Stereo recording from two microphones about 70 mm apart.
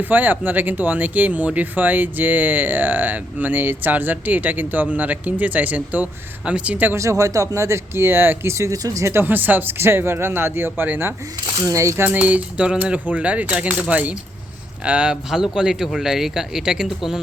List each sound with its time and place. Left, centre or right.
0.0 s speech: right
6.9 s speech: right
8.5 s speech: right
9.1 s speech: right
11.6 s speech: right
12.0 s speech: right